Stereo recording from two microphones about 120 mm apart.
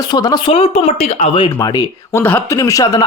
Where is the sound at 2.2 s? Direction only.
15° left (ahead or behind).